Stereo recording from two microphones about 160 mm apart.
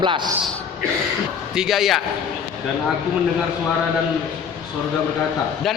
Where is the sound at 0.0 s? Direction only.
30° right (ahead or behind).